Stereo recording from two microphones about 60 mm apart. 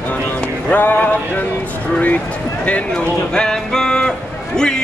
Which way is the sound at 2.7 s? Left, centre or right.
Centre.